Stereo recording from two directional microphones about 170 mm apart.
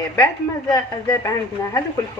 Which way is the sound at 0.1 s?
20° left (ahead or behind).